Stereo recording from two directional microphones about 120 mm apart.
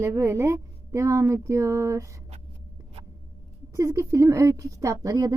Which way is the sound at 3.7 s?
25° right (ahead or behind).